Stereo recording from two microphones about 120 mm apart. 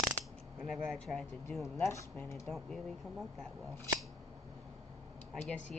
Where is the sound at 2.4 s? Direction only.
Centre (ahead or behind).